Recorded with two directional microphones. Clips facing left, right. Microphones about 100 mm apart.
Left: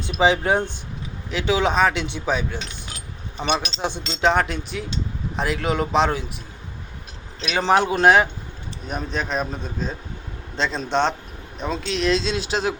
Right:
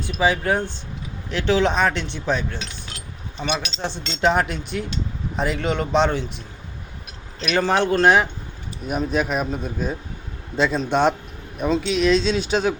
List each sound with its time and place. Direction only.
0.2 s speech: 20° left (ahead or behind)
1.3 s speech: 5° left (ahead or behind)
3.8 s speech: 15° left (ahead or behind)
4.2 s speech: centre (ahead or behind)
7.5 s speech: 10° left (ahead or behind)
8.9 s a man's voice: 5° right (ahead or behind)